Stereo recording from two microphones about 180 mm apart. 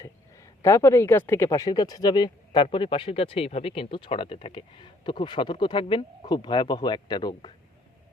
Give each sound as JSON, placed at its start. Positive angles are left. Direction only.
{"t": 0.0, "sound": "speech", "side_deg": 15}